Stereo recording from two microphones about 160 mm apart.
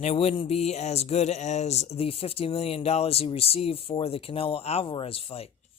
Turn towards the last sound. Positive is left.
turn(degrees=35)  # may be behind; listen again after turning